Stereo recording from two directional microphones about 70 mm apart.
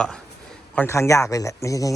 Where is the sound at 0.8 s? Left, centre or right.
Left.